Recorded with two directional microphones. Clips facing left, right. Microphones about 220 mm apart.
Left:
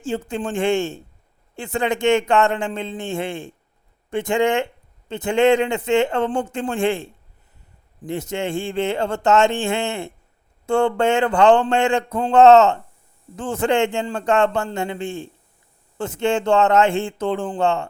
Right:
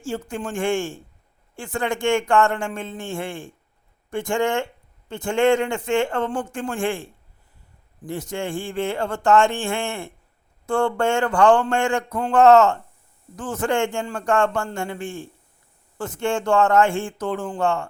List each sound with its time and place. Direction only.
0.3 s speech: 20° left (ahead or behind)